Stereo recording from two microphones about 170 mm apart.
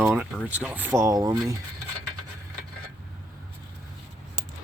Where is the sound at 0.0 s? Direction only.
10° right (ahead or behind).